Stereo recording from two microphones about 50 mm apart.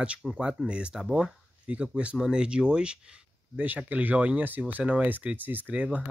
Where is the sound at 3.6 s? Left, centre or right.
Right.